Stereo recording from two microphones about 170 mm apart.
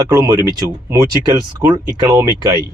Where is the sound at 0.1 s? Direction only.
20° right (ahead or behind).